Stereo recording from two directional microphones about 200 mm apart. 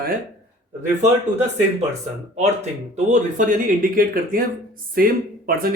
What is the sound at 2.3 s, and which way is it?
Speech, 35° right (ahead or behind).